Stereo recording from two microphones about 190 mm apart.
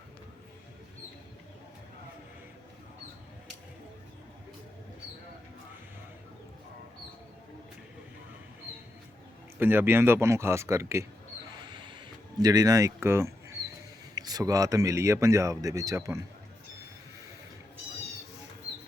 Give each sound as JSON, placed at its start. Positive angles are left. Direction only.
{"t": 9.6, "sound": "speech", "side_deg": -10}
{"t": 11.7, "sound": "a sound", "side_deg": -25}
{"t": 14.2, "sound": "speech", "side_deg": -20}